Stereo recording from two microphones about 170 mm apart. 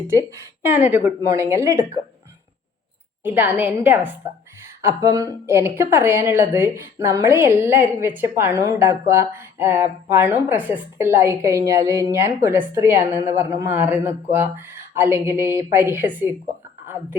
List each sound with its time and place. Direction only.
0.1 s a woman's voice: 15° right (ahead or behind)
3.2 s a woman's voice: 10° right (ahead or behind)